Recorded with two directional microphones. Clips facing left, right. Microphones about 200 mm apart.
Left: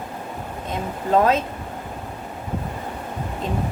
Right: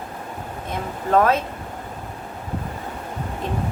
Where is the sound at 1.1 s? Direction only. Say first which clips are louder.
Even; 20° left (ahead or behind).